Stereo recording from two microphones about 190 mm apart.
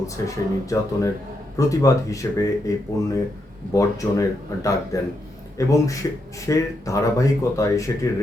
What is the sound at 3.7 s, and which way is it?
Speech, 15° left (ahead or behind).